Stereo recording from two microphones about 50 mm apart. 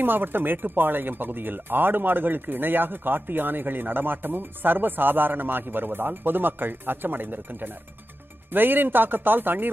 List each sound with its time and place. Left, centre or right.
0.0 s speech: right